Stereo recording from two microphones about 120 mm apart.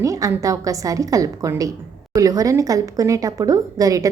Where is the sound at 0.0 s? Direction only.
25° right (ahead or behind).